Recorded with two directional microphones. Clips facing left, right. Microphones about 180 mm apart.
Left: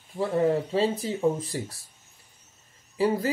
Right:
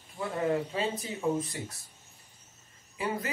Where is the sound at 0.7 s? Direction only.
30° left (ahead or behind).